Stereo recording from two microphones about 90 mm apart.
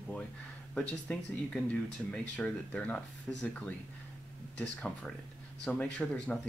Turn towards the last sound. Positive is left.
turn(degrees=10)  # may be behind; listen again after turning